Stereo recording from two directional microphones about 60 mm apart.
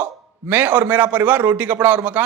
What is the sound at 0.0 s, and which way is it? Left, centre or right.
A man's voice, right.